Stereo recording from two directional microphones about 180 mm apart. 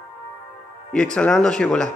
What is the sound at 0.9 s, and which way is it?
A man's voice, 5° left (ahead or behind).